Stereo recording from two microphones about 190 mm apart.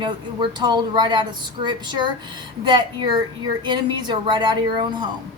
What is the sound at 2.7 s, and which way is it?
A woman's voice, 25° right (ahead or behind).